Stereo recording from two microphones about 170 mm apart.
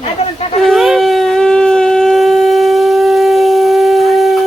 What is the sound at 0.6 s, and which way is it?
Shofar, centre (ahead or behind).